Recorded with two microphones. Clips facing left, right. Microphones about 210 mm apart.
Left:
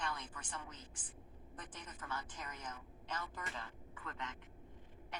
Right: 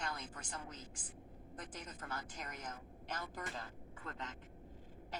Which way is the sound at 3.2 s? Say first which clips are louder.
Right 2 dB; 40° right (ahead or behind).